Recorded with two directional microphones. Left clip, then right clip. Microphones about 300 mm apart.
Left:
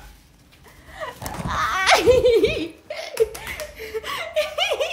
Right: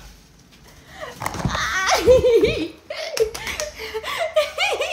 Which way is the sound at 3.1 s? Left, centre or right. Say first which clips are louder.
Even; right.